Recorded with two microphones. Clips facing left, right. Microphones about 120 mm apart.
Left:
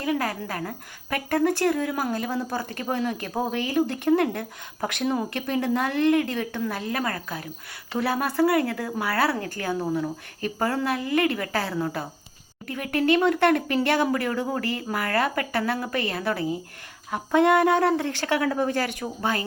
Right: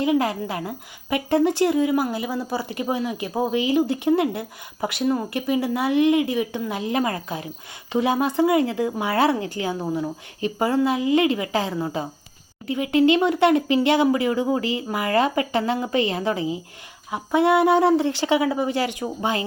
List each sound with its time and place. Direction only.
0.0 s a woman's voice: 15° right (ahead or behind)